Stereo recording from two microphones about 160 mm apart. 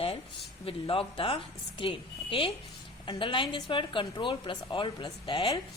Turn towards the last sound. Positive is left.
turn(degrees=30)  # may be behind; listen again after turning